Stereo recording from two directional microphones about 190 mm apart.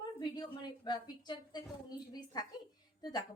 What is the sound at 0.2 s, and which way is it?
A woman's voice, 20° left (ahead or behind).